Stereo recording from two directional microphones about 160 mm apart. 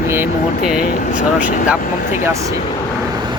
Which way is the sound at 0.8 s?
60° left (ahead or behind).